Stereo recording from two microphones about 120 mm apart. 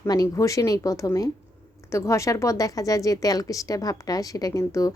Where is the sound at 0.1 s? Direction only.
30° left (ahead or behind).